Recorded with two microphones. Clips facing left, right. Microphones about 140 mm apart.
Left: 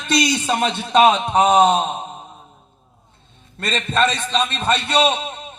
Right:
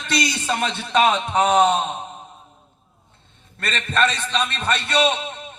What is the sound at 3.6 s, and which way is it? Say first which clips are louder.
A man's voice: left 2 dB; 20° left (ahead or behind).